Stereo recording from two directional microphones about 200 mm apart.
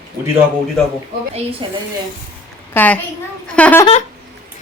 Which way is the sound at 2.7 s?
10° left (ahead or behind).